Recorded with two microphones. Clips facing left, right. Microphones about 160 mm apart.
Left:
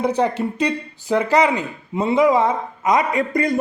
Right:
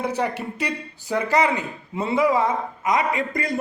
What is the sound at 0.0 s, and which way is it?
Speech, 20° left (ahead or behind).